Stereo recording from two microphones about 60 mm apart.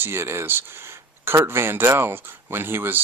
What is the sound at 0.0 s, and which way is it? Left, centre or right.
Speech, right.